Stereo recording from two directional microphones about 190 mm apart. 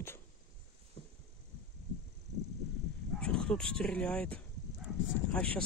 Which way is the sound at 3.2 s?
5° left (ahead or behind).